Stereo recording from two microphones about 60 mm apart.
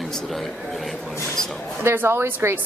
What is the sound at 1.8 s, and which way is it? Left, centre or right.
Speech, right.